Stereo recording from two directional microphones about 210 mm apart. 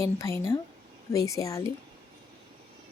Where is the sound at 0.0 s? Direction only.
15° left (ahead or behind).